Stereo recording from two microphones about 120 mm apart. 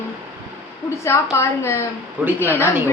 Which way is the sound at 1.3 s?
20° left (ahead or behind).